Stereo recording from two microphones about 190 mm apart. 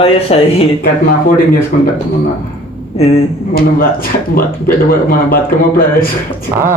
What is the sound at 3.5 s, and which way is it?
Speech, 50° left (ahead or behind).